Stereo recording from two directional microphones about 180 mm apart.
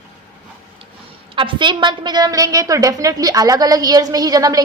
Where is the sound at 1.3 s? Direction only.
25° right (ahead or behind).